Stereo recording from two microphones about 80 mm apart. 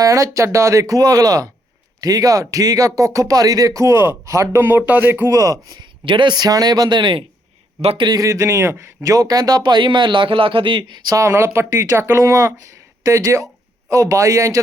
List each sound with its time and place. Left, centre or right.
0.0 s speech: right
4.9 s a man's voice: right
5.3 s speech: right
5.6 s a man's voice: right
8.2 s speech: right
9.0 s a man's voice: right
11.1 s speech: right